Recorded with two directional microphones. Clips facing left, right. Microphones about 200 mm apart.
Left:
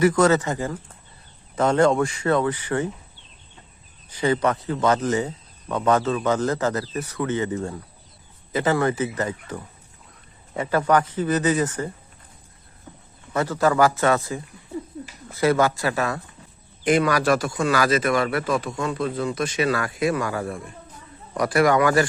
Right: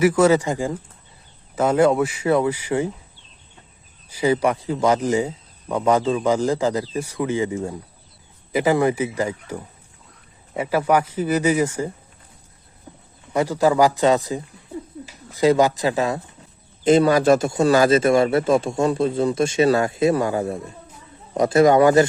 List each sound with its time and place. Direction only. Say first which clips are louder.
0.0 s speech: right 2 dB; 10° right (ahead or behind)
4.1 s speech: right 2 dB; 10° right (ahead or behind)
13.3 s a man's voice: right 3 dB; 15° right (ahead or behind)